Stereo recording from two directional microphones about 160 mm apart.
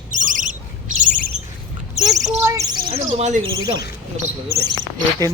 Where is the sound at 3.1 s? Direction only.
45° right (ahead or behind).